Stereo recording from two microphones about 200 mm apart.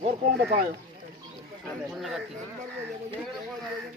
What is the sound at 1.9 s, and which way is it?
Speech, centre (ahead or behind).